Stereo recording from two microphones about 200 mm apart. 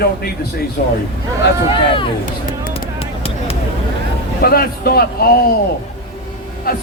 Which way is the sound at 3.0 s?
30° left (ahead or behind).